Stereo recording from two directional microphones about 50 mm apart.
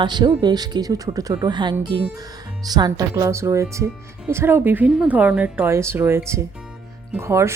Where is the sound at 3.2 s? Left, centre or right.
Right.